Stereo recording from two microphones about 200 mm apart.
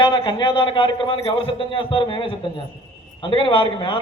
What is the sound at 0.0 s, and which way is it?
A man's voice, 25° left (ahead or behind).